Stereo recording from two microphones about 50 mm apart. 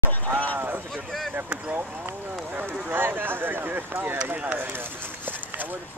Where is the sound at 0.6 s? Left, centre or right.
Right.